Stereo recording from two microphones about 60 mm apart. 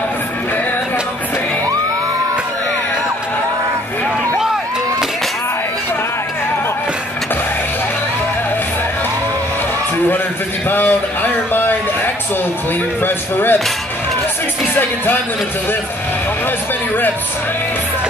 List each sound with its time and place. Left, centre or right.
10.7 s a sound: left
13.0 s speech: left
14.7 s speech: left
16.4 s speech: left